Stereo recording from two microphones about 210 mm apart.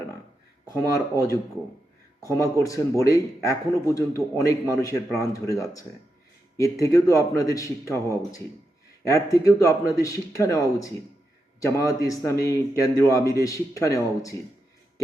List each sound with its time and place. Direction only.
0.7 s a man's voice: 15° left (ahead or behind)